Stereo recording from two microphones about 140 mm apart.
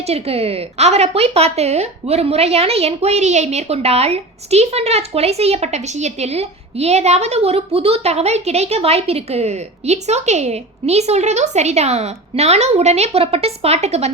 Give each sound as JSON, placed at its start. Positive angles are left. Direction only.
{"t": 0.0, "sound": "a woman's voice", "side_deg": -45}